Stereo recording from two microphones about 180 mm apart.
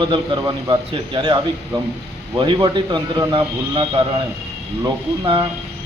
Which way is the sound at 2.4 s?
25° right (ahead or behind).